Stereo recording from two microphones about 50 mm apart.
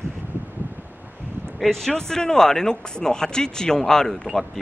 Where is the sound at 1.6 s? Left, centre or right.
Centre.